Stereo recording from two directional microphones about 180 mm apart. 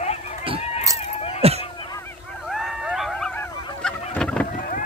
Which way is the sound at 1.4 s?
35° right (ahead or behind).